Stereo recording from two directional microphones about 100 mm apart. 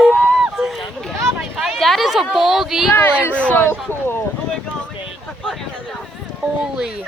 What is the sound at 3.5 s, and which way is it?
Speech, 20° left (ahead or behind).